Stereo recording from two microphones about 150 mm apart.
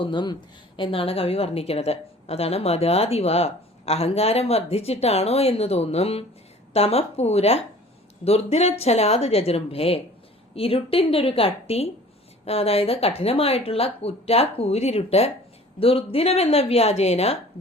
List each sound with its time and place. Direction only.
0.0 s a woman's voice: 30° left (ahead or behind)